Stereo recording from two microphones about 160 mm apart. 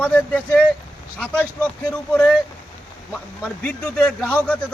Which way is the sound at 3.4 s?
5° left (ahead or behind).